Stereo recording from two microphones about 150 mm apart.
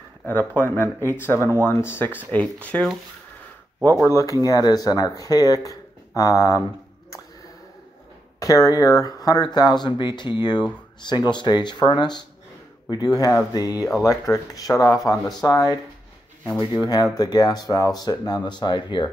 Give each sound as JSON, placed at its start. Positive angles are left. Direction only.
{"t": 0.2, "sound": "speech", "side_deg": 10}
{"t": 4.1, "sound": "speech", "side_deg": 20}
{"t": 8.4, "sound": "speech", "side_deg": 20}
{"t": 16.8, "sound": "speech", "side_deg": 25}